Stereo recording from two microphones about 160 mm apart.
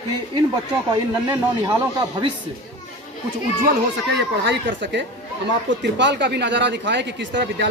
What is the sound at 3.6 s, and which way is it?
Speech, 90° right.